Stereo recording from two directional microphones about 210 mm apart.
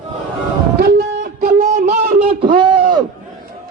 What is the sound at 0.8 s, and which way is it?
Guitar, 45° right (ahead or behind).